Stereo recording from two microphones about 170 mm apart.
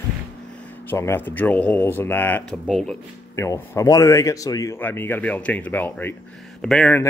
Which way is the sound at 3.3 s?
15° left (ahead or behind).